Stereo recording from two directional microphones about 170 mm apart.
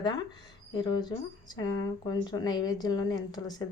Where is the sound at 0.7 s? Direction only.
25° left (ahead or behind).